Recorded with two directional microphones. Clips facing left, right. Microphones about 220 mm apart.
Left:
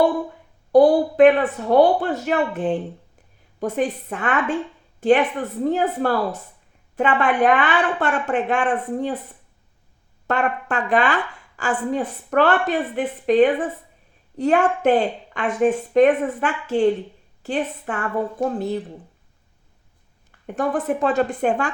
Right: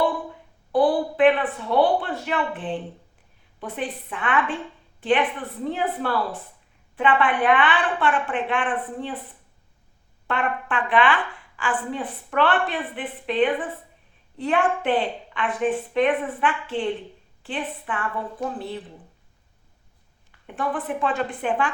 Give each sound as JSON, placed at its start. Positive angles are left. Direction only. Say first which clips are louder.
{"t": 0.7, "sound": "speech", "louder": "left 6 dB", "side_deg": 40}
{"t": 10.2, "sound": "speech", "louder": "left 4 dB", "side_deg": 40}
{"t": 20.6, "sound": "speech", "louder": "left 5 dB", "side_deg": 45}